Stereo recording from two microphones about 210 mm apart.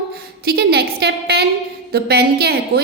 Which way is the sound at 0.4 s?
50° right (ahead or behind).